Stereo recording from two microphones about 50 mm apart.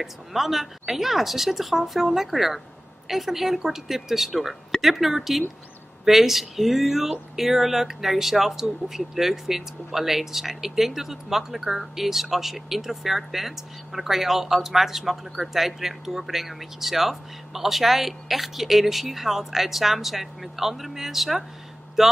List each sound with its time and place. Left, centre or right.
0.0 s speech: centre